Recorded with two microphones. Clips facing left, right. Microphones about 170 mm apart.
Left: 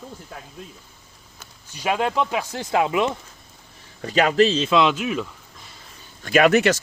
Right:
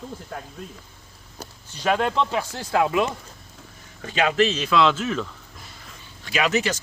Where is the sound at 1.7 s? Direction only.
10° left (ahead or behind).